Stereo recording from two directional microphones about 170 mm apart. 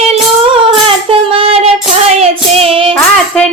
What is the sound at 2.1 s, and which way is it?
Child singing, 35° right (ahead or behind).